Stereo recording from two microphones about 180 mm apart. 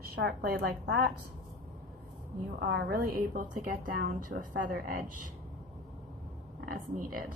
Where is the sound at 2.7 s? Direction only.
60° right (ahead or behind).